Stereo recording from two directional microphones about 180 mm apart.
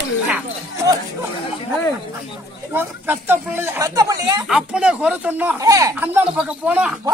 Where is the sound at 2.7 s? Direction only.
10° right (ahead or behind).